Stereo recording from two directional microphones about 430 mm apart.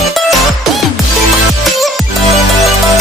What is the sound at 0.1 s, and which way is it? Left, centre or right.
Music, centre.